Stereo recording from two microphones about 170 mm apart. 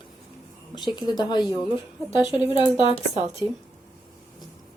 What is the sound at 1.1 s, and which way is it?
Speech, 25° left (ahead or behind).